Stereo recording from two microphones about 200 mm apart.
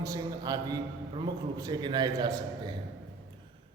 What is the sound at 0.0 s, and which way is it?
A man's voice, 20° right (ahead or behind).